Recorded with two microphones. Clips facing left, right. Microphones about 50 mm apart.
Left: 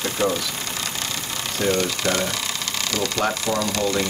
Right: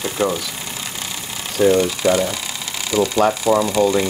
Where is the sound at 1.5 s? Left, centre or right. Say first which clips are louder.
Right 7 dB; centre.